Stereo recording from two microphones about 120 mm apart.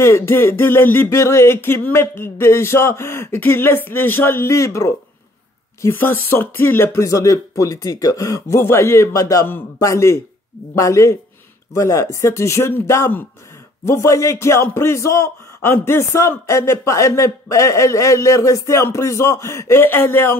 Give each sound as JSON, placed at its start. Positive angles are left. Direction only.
{"t": 0.0, "sound": "speech", "side_deg": 20}